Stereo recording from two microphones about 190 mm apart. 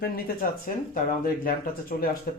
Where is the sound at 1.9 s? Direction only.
50° left (ahead or behind).